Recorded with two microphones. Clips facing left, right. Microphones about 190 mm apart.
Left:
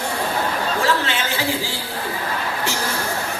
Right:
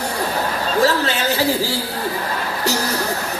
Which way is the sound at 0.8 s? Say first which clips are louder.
Right 6 dB; 40° right (ahead or behind).